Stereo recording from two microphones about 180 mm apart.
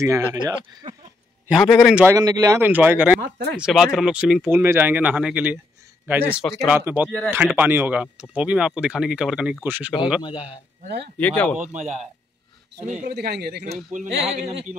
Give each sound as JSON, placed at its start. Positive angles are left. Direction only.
{"t": 0.0, "sound": "speech", "side_deg": -20}
{"t": 1.5, "sound": "a man's voice", "side_deg": 0}
{"t": 2.0, "sound": "speech", "side_deg": -20}
{"t": 3.2, "sound": "speech", "side_deg": -55}
{"t": 3.5, "sound": "a man's voice", "side_deg": -5}
{"t": 10.2, "sound": "a man's voice", "side_deg": 25}
{"t": 11.1, "sound": "speech", "side_deg": 10}
{"t": 11.7, "sound": "speech", "side_deg": -40}
{"t": 13.0, "sound": "a man's voice", "side_deg": -65}